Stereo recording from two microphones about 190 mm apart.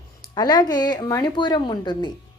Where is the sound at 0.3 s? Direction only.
20° left (ahead or behind).